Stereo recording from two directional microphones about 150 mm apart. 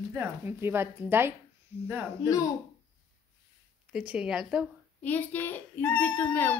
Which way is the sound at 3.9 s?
5° right (ahead or behind).